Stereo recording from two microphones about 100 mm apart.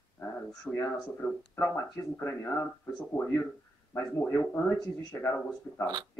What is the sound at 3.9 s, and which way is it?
Speech, 20° left (ahead or behind).